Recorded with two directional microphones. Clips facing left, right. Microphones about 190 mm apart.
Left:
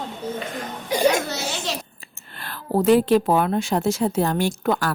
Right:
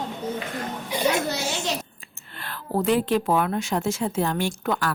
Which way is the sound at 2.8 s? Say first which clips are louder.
Left 6 dB; 40° left (ahead or behind).